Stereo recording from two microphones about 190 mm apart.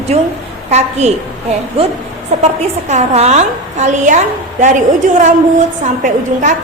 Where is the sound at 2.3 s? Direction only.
40° right (ahead or behind).